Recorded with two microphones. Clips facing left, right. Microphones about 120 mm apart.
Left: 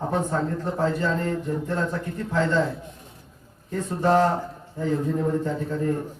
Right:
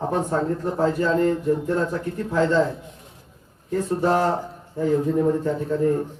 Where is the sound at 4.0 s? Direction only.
10° right (ahead or behind).